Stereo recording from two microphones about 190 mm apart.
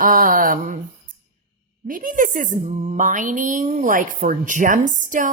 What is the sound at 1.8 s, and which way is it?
A woman's voice, 45° right (ahead or behind).